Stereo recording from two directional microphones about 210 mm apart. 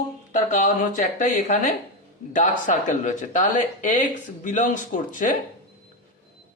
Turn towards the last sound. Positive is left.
turn(degrees=40)  # may be behind; listen again after turning